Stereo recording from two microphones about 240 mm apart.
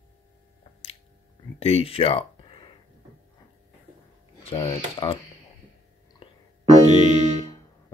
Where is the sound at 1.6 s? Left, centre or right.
Left.